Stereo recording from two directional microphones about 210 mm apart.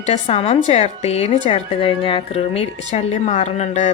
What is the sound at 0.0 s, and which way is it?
A woman's voice, 30° left (ahead or behind).